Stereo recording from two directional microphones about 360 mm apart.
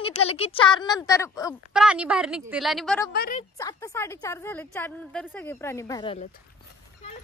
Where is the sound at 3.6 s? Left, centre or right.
Centre.